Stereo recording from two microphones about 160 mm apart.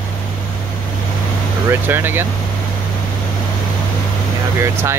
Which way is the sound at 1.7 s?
15° right (ahead or behind).